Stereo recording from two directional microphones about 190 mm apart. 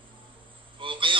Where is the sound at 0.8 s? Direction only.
25° right (ahead or behind).